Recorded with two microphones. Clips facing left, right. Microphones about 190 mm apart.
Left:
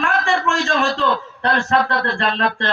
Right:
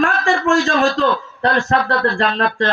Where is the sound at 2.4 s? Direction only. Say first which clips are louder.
Right 3 dB; 40° right (ahead or behind).